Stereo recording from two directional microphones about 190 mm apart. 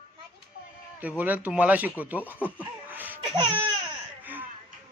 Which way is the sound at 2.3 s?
10° right (ahead or behind).